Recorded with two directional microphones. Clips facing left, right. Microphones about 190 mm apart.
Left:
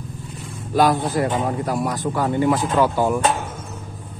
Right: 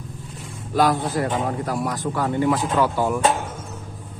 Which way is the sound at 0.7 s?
15° left (ahead or behind).